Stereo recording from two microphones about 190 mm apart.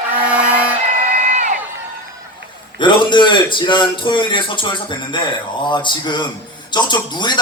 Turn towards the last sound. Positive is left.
turn(degrees=25)  # may be behind; listen again after turning